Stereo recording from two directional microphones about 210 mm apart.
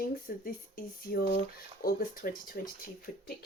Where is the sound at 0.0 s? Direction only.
45° left (ahead or behind).